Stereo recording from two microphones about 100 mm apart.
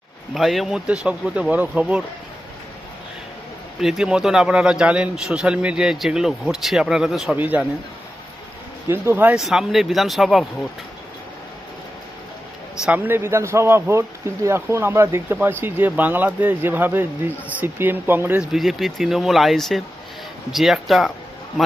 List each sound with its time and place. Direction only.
0.3 s a man's voice: centre (ahead or behind)
3.8 s a man's voice: 5° right (ahead or behind)
7.3 s a man's voice: 15° right (ahead or behind)
8.9 s speech: 20° right (ahead or behind)
9.4 s speech: 5° right (ahead or behind)
13.1 s speech: 25° right (ahead or behind)
18.5 s speech: centre (ahead or behind)